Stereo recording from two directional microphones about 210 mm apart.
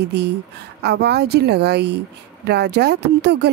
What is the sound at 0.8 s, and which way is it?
Speech, 50° right (ahead or behind).